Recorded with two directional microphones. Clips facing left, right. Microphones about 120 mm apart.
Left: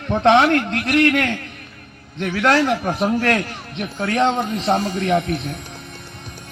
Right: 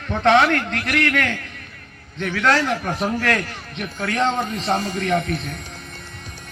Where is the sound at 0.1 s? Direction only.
25° left (ahead or behind).